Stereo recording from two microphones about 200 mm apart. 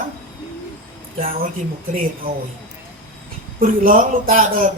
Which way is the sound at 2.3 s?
50° right (ahead or behind).